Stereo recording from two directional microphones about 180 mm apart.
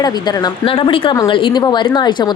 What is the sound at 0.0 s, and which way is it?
Speech, 20° left (ahead or behind).